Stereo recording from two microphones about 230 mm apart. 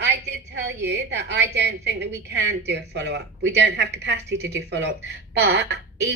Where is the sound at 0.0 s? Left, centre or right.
Right.